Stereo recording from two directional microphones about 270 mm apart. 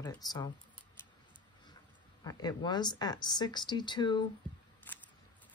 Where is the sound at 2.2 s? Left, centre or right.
Centre.